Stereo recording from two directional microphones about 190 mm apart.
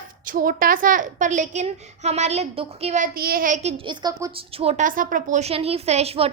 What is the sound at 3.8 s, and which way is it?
Speech, 25° right (ahead or behind).